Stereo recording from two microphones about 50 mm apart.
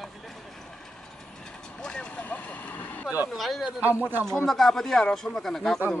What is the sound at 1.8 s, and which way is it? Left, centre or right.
Vehicle, centre.